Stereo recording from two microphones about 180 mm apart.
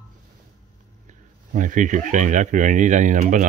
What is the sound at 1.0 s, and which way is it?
Speech, 45° right (ahead or behind).